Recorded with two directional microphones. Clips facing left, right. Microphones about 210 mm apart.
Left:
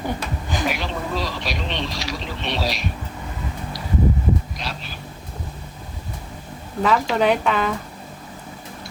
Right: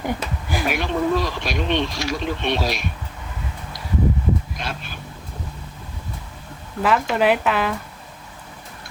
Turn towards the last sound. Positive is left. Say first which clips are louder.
# even
turn(degrees=-5)  # may be behind; listen again after turning